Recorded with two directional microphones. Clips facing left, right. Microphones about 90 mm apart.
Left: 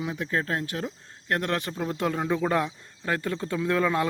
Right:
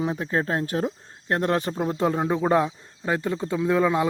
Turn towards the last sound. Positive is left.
turn(degrees=-15)  # may be behind; listen again after turning